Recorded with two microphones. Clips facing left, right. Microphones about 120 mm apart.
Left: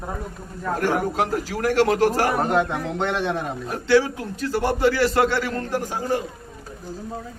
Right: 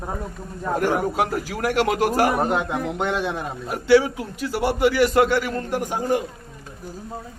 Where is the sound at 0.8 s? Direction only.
15° right (ahead or behind).